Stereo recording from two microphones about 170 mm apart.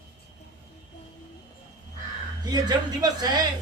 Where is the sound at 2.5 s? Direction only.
25° right (ahead or behind).